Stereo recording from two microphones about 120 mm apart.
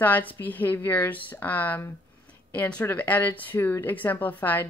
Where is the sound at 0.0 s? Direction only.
15° left (ahead or behind).